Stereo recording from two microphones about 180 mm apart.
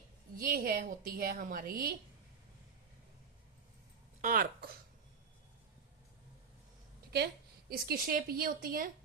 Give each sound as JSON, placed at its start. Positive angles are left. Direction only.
{"t": 0.3, "sound": "a woman's voice", "side_deg": -50}
{"t": 4.2, "sound": "speech", "side_deg": -50}
{"t": 7.7, "sound": "speech", "side_deg": -55}